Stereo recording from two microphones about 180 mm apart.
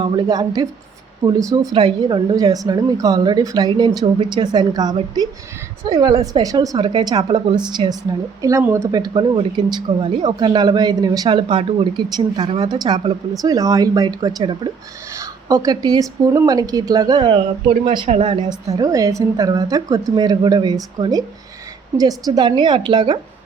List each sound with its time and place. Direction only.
0.0 s a woman's voice: 25° right (ahead or behind)
18.4 s a woman's voice: 20° right (ahead or behind)